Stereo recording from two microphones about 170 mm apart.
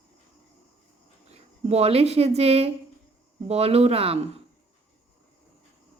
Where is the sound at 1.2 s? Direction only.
40° right (ahead or behind).